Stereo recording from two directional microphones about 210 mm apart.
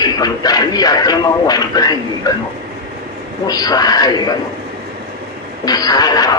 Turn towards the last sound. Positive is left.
turn(degrees=20)  # may be behind; listen again after turning